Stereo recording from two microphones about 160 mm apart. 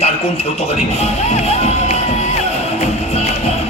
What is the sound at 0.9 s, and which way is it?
Music, 40° left (ahead or behind).